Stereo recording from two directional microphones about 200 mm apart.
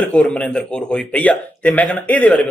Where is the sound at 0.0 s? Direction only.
5° left (ahead or behind).